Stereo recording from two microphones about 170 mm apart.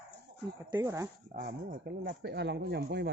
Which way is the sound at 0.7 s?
20° right (ahead or behind).